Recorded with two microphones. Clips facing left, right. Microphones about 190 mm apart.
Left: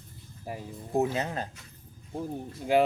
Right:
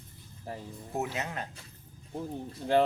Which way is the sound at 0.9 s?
30° left (ahead or behind).